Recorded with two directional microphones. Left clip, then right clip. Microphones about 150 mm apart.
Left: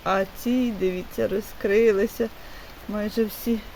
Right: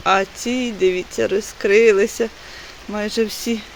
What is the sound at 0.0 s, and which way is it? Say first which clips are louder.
Speech: right 7 dB; 5° right (ahead or behind).